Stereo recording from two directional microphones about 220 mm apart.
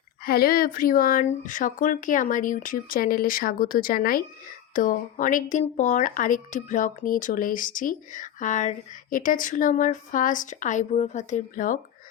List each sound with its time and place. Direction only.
0.3 s speech: 45° left (ahead or behind)